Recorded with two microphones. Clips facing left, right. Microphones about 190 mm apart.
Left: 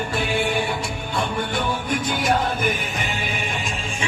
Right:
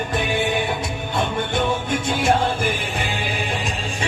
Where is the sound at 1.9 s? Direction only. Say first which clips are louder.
Right 1 dB; 25° right (ahead or behind).